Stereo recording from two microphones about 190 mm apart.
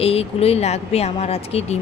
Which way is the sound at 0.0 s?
30° left (ahead or behind).